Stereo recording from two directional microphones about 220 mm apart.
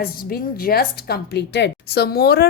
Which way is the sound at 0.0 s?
45° left (ahead or behind).